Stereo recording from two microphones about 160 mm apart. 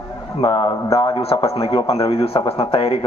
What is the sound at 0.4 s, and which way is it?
Speech, 30° left (ahead or behind).